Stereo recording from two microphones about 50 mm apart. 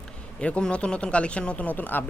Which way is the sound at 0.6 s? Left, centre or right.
Centre.